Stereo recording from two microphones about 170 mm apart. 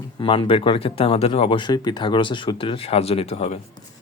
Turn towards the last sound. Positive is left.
turn(degrees=35)  # may be behind; listen again after turning